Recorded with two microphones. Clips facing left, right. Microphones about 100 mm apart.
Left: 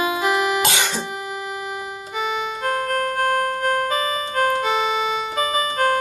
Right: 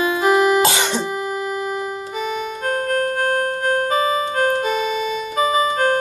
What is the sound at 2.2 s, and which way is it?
Music, 45° right (ahead or behind).